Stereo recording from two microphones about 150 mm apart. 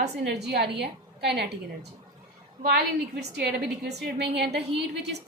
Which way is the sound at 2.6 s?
90° right.